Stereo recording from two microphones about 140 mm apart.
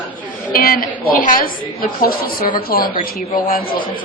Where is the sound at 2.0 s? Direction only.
90° left.